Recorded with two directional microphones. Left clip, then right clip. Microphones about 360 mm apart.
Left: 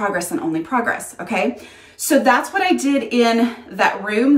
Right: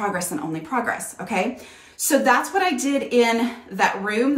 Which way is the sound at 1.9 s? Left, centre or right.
Centre.